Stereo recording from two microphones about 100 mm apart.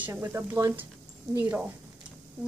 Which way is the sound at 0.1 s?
30° right (ahead or behind).